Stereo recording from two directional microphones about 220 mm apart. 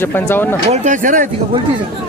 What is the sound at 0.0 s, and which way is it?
Speech, 10° left (ahead or behind).